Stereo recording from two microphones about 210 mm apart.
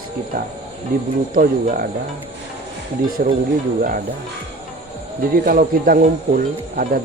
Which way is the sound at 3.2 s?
40° right (ahead or behind).